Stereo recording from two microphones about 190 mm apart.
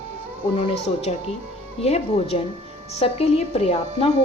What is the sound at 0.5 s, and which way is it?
A woman's voice, 35° left (ahead or behind).